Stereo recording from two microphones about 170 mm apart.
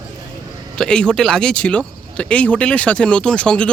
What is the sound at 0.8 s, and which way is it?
Speech, 5° left (ahead or behind).